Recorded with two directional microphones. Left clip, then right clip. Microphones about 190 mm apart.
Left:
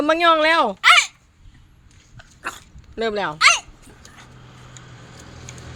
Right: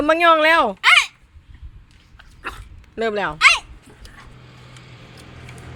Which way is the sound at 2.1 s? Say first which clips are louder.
Left 1 dB; 20° left (ahead or behind).